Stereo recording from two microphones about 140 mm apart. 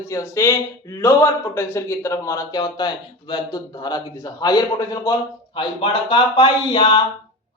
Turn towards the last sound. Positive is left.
turn(degrees=30)  # may be behind; listen again after turning